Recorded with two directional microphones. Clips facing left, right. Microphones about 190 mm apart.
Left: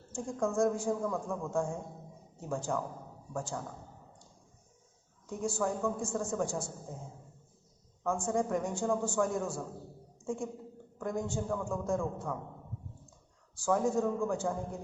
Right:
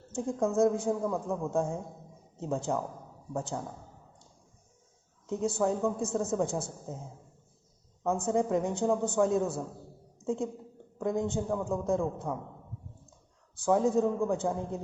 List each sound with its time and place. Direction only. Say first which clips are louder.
0.1 s a woman's voice: right 4 dB; 20° right (ahead or behind)
5.3 s a woman's voice: right 4 dB; 20° right (ahead or behind)
8.3 s a woman's voice: right 4 dB; 20° right (ahead or behind)
13.7 s a man's voice: right 4 dB; 20° right (ahead or behind)